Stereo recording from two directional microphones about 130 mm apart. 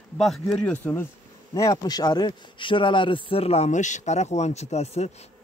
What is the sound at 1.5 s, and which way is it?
A man's voice, 25° left (ahead or behind).